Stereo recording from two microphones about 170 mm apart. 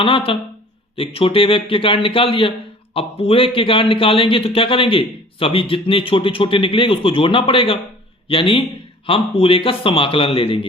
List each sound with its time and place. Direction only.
0.0 s a man's voice: 30° left (ahead or behind)